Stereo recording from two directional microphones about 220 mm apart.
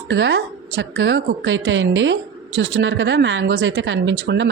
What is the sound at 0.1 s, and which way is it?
A woman's voice, 55° right (ahead or behind).